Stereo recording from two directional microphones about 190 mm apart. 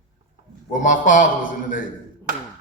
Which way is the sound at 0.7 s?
45° left (ahead or behind).